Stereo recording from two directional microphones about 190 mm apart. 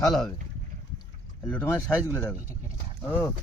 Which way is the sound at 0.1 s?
Centre (ahead or behind).